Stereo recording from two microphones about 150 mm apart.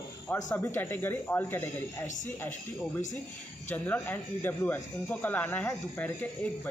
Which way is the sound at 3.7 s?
10° left (ahead or behind).